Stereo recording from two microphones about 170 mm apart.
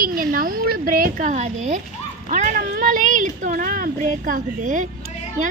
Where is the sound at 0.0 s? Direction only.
60° right (ahead or behind).